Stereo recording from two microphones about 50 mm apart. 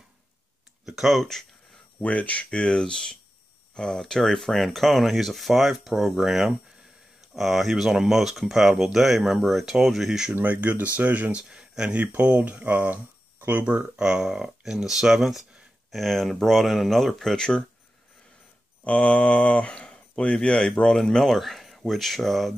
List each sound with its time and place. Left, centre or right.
0.8 s speech: centre
2.0 s speech: left
2.6 s speech: centre
10.3 s speech: right
11.3 s speech: centre
11.9 s speech: right; by 17.6 s centre
18.9 s speech: left; by 22.5 s centre